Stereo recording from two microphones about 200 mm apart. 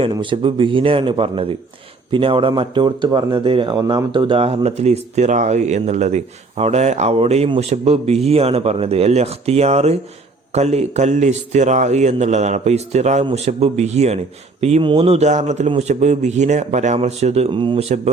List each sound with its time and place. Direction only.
0.0 s a man's voice: 25° right (ahead or behind)